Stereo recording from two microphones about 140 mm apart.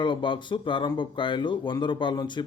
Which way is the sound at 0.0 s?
35° left (ahead or behind).